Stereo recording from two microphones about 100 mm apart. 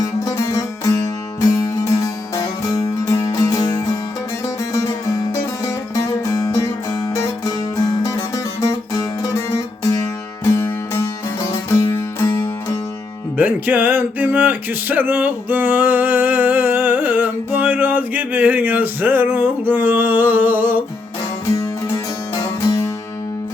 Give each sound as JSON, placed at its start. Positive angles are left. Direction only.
{"t": 0.0, "sound": "music", "side_deg": 30}
{"t": 13.3, "sound": "music", "side_deg": -15}
{"t": 21.5, "sound": "music", "side_deg": 30}